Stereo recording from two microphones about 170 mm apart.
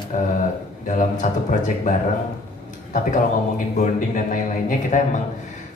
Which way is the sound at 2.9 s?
50° left (ahead or behind).